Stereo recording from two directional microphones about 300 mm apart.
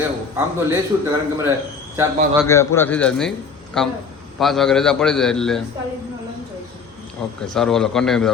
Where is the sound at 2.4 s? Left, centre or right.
Centre.